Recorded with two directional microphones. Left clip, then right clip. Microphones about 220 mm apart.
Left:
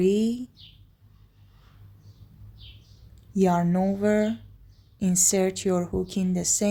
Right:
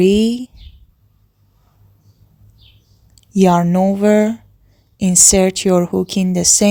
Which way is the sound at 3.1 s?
35° right (ahead or behind).